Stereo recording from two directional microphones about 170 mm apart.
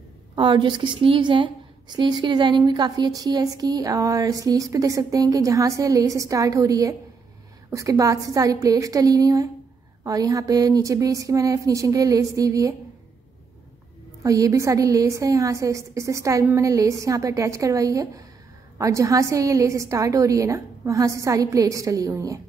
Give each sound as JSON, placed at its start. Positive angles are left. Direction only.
{"t": 0.4, "sound": "a woman's voice", "side_deg": -30}
{"t": 14.2, "sound": "a woman's voice", "side_deg": -20}